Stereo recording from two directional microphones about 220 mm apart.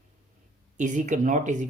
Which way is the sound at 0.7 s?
35° right (ahead or behind).